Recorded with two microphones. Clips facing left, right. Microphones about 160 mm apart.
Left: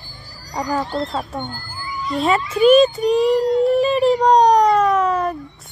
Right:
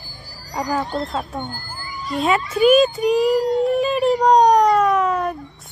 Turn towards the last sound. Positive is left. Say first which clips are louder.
# left 1 dB
turn(degrees=0)  # may be behind; listen again after turning